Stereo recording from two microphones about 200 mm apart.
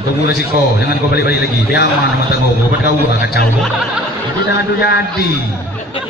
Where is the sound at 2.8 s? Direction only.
55° left (ahead or behind).